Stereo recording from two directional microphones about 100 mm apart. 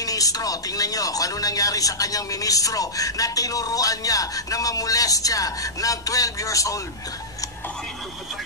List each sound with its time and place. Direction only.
0.0 s speech: 35° left (ahead or behind)